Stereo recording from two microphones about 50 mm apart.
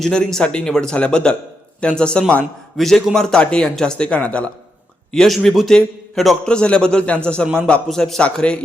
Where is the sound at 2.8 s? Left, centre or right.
Centre; by 4.5 s left.